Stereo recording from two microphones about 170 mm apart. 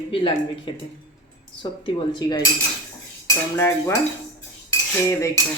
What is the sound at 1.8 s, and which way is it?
Speech, 25° left (ahead or behind).